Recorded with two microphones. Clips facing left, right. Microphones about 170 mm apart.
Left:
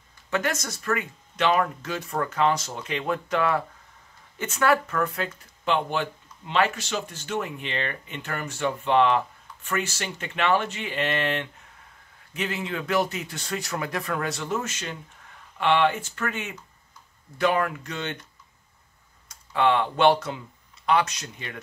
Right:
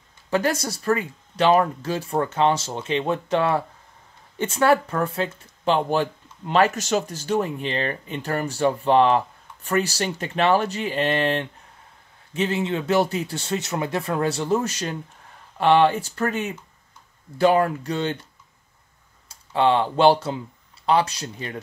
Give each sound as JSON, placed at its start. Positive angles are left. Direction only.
{"t": 0.3, "sound": "speech", "side_deg": -35}
{"t": 19.2, "sound": "speech", "side_deg": -30}